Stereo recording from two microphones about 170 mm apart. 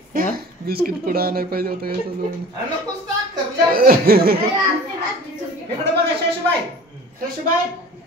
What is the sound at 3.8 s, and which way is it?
Speech, 60° right (ahead or behind).